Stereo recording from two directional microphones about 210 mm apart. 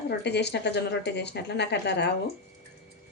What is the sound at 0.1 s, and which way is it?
Speech, 55° left (ahead or behind).